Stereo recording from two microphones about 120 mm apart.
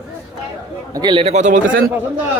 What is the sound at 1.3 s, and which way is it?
Speech, 85° right.